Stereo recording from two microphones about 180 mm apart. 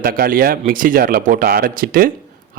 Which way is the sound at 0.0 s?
55° right (ahead or behind).